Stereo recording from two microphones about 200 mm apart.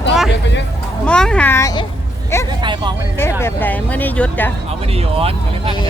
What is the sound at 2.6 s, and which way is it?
Speech, 25° right (ahead or behind).